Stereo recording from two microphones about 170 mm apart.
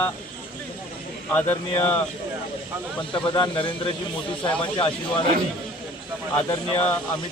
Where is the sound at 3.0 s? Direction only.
30° left (ahead or behind).